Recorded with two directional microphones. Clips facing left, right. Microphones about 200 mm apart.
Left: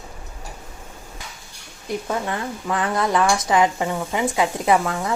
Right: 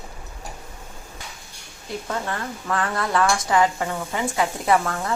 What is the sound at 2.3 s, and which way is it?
A woman's voice, 15° left (ahead or behind).